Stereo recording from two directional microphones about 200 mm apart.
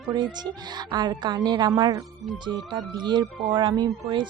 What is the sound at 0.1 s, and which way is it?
A woman's voice, 20° right (ahead or behind).